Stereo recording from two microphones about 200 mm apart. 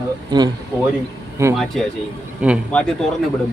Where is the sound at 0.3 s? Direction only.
20° right (ahead or behind).